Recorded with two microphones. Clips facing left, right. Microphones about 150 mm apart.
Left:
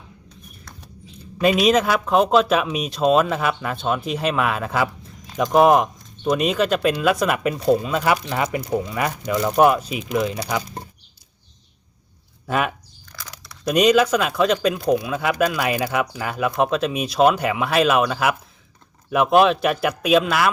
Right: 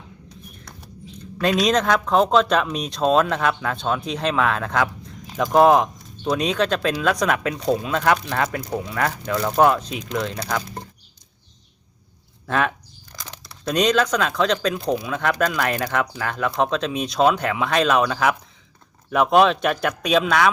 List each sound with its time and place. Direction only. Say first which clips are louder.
1.2 s speech: left 3 dB; 10° left (ahead or behind)
12.5 s speech: even; 10° left (ahead or behind)
13.1 s a sound: right 1 dB; 25° right (ahead or behind)
13.7 s speech: left 3 dB; 10° left (ahead or behind)